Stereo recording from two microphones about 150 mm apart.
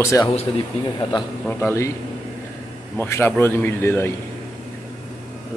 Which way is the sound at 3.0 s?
15° left (ahead or behind).